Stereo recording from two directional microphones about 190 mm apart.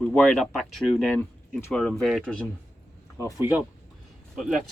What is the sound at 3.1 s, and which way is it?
Speech, 15° left (ahead or behind).